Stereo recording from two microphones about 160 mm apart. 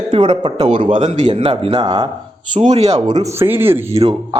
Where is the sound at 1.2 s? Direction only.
30° right (ahead or behind).